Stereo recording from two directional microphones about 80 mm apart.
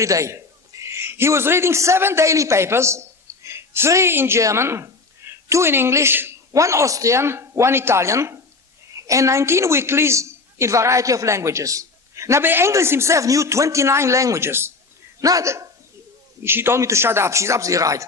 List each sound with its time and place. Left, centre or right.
0.0 s a man's voice: right
6.5 s a woman's voice: right
15.2 s speech: right
16.4 s a woman's voice: right